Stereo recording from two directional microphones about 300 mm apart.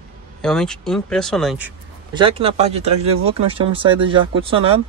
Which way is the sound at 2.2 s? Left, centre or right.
Centre.